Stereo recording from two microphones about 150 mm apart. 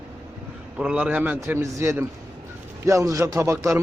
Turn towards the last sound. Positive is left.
turn(degrees=-20)  # may be behind; listen again after turning